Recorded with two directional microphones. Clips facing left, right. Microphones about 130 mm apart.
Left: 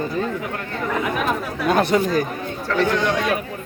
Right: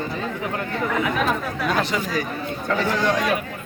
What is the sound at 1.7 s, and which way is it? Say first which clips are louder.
Speech: left 7 dB; 50° left (ahead or behind).